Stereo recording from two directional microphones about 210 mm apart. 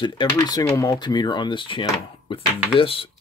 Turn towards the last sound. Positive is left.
turn(degrees=25)  # may be behind; listen again after turning